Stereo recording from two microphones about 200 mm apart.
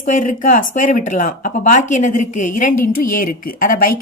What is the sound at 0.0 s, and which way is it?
A woman's voice, 40° left (ahead or behind).